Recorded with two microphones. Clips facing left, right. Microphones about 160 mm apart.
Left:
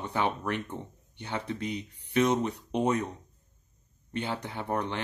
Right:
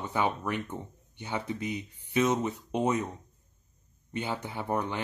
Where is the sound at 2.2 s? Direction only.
Centre (ahead or behind).